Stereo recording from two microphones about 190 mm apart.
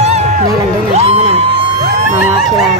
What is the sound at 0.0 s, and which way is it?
Music, 35° right (ahead or behind).